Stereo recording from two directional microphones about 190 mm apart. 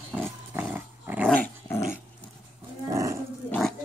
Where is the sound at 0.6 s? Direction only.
10° right (ahead or behind).